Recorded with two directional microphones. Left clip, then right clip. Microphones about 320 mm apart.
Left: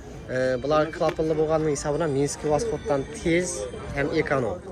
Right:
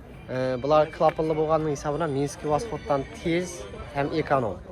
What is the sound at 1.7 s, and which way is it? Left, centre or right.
Speech, centre.